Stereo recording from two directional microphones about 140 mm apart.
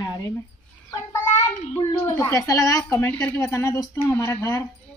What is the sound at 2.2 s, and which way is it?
A woman's voice, 25° left (ahead or behind).